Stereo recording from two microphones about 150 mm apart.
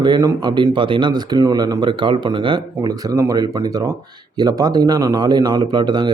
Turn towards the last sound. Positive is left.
turn(degrees=-30)  # may be behind; listen again after turning